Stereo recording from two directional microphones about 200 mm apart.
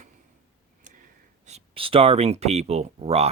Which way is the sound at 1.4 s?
30° right (ahead or behind).